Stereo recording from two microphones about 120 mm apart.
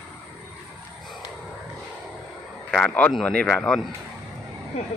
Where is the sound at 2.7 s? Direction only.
10° left (ahead or behind).